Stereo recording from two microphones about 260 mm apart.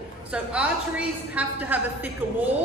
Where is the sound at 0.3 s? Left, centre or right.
Centre.